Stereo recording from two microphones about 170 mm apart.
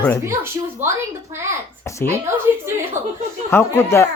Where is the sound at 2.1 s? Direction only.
15° right (ahead or behind).